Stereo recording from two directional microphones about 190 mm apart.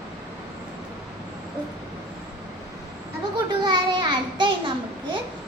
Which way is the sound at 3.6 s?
25° right (ahead or behind).